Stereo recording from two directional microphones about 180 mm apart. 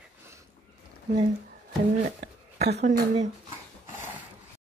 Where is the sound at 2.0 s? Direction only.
40° right (ahead or behind).